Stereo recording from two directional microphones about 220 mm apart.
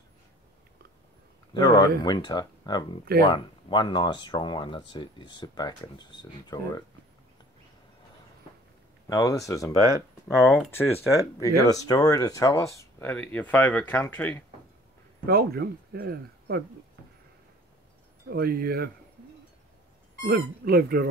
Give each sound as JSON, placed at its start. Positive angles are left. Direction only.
{"t": 1.5, "sound": "speech", "side_deg": 20}
{"t": 9.1, "sound": "speech", "side_deg": 15}
{"t": 15.2, "sound": "speech", "side_deg": -45}
{"t": 18.3, "sound": "speech", "side_deg": -45}
{"t": 20.2, "sound": "speech", "side_deg": -45}